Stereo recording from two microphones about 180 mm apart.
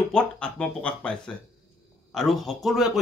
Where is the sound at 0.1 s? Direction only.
5° left (ahead or behind).